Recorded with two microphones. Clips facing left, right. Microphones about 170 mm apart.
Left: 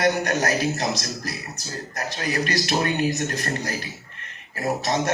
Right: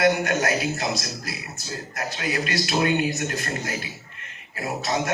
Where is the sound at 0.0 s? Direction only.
40° left (ahead or behind).